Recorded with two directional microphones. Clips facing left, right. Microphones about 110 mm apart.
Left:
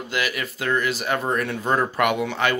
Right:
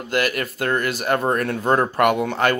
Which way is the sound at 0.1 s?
50° right (ahead or behind).